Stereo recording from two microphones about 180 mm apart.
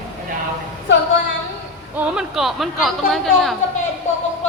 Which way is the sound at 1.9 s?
5° right (ahead or behind).